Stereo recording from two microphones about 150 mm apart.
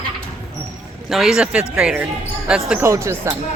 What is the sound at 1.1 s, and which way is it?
Speech, centre (ahead or behind).